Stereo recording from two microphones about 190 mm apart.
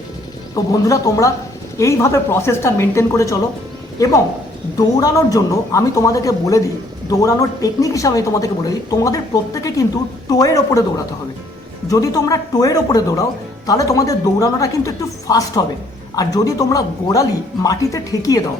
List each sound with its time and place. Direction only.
0.5 s speech: 20° left (ahead or behind)
4.9 s speech: 20° left (ahead or behind)